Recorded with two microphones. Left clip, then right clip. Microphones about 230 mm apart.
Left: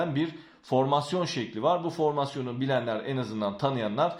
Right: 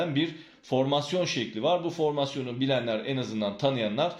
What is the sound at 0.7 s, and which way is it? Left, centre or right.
A man's voice, left.